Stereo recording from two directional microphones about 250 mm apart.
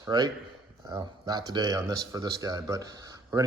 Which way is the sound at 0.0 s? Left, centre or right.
Centre.